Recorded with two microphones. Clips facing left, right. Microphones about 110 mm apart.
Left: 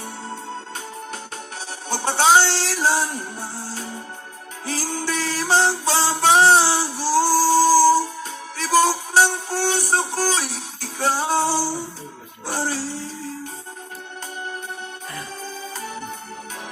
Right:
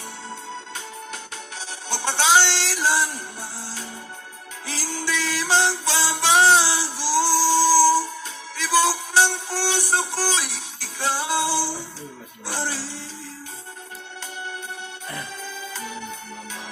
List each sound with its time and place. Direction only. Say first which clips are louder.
1.9 s music: left 3 dB; 40° left (ahead or behind)
12.5 s a sound: left 4 dB; 40° left (ahead or behind)
15.7 s organ: left 1 dB; 40° left (ahead or behind)